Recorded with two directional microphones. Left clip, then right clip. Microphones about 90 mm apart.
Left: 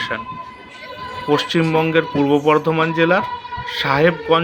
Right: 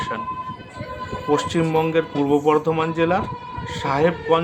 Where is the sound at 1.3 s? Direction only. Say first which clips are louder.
Left 3 dB; 20° left (ahead or behind).